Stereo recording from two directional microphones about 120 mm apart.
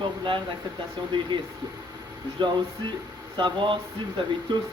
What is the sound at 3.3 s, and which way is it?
A man's voice, 40° right (ahead or behind).